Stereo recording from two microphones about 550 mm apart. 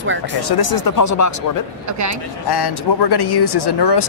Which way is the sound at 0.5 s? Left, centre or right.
Left.